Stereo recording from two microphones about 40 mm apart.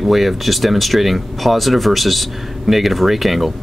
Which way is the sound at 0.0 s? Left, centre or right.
Centre.